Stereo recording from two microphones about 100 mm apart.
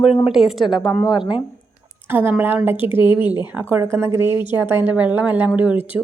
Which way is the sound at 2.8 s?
60° left (ahead or behind).